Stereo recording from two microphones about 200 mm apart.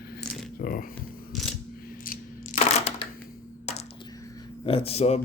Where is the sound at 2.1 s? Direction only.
35° left (ahead or behind).